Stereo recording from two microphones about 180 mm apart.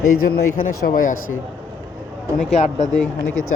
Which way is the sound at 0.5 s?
50° left (ahead or behind).